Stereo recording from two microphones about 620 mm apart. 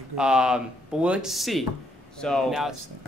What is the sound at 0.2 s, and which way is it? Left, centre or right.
Speech, centre.